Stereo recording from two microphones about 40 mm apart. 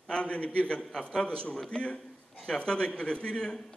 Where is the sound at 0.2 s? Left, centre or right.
Left.